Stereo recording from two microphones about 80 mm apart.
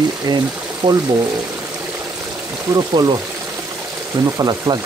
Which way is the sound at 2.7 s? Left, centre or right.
Right.